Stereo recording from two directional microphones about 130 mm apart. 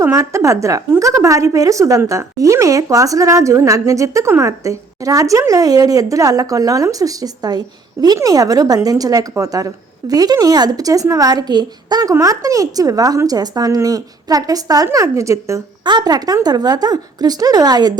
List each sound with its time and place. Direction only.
0.0 s a woman's voice: 20° right (ahead or behind)
15.8 s speech: 35° right (ahead or behind)